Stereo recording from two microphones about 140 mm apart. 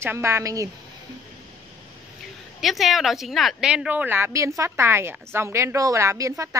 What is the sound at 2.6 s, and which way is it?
A woman's voice, centre (ahead or behind).